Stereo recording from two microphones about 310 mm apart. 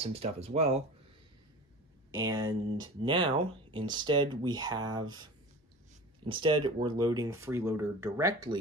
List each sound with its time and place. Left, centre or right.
0.0 s speech: centre
2.1 s speech: centre